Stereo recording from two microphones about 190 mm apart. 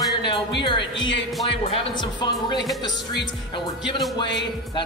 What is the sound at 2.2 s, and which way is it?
Speech, 20° left (ahead or behind).